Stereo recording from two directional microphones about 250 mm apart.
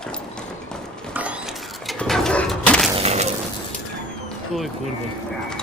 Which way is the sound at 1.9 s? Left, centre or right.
Centre.